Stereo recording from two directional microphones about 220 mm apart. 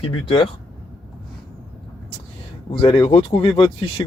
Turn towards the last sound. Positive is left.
turn(degrees=25)  # may be behind; listen again after turning